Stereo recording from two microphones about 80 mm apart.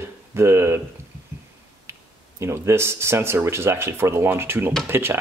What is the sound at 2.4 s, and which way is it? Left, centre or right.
Speech, right.